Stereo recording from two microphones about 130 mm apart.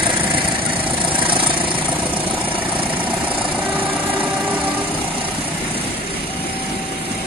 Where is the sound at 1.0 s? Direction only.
40° right (ahead or behind).